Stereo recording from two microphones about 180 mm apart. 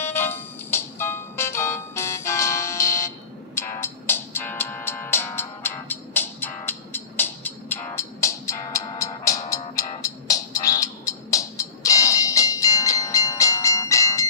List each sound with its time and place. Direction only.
0.0 s music: 10° left (ahead or behind)